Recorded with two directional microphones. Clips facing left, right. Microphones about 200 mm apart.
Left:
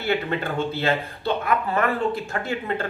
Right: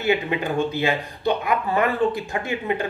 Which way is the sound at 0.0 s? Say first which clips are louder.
Right 2 dB; 15° right (ahead or behind).